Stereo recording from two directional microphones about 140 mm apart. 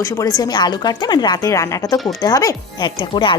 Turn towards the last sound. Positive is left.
turn(degrees=35)  # may be behind; listen again after turning